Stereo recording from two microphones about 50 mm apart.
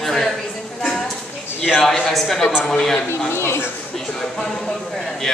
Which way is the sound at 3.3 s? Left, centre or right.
Left.